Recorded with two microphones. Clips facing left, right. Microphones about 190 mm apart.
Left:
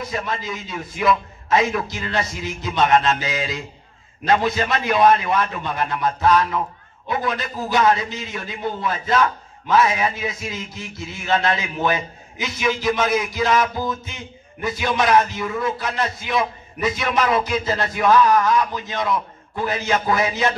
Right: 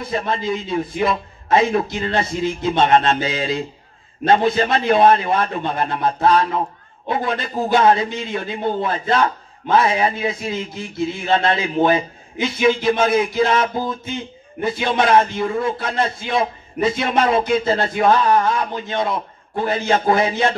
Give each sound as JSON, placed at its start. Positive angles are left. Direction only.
{"t": 0.0, "sound": "a man's voice", "side_deg": -30}